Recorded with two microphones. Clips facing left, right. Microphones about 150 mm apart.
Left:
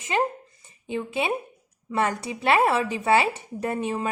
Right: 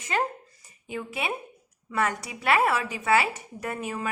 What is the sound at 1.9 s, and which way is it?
Speech, 25° left (ahead or behind).